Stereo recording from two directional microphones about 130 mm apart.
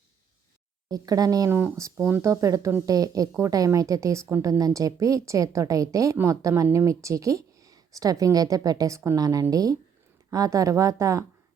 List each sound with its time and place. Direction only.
0.9 s a woman's voice: 30° right (ahead or behind)
1.5 s a woman's voice: 15° right (ahead or behind)